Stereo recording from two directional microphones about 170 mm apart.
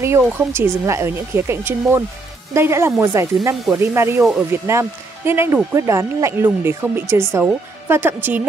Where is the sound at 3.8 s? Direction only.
15° right (ahead or behind).